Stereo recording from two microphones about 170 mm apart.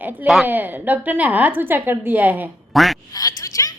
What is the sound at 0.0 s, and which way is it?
A woman's voice, 10° right (ahead or behind).